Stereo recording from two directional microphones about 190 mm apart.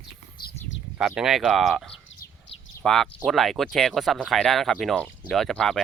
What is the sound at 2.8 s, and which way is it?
Speech, centre (ahead or behind).